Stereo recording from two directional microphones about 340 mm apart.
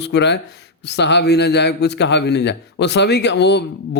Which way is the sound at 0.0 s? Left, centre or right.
Left.